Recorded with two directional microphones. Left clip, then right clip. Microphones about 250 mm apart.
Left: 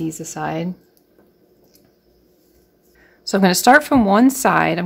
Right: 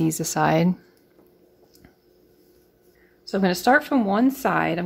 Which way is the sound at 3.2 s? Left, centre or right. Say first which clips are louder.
Left 7 dB; centre.